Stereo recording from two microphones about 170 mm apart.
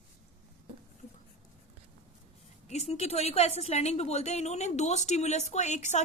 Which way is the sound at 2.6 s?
40° left (ahead or behind).